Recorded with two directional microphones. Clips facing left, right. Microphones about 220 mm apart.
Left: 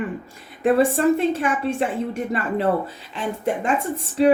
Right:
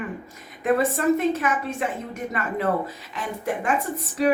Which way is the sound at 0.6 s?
30° left (ahead or behind).